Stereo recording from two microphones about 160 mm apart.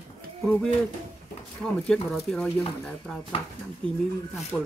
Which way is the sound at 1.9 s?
5° left (ahead or behind).